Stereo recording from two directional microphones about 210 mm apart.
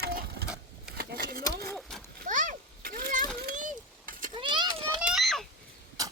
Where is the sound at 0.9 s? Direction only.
45° right (ahead or behind).